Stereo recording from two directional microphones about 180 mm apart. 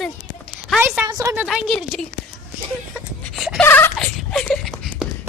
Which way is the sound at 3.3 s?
Centre (ahead or behind).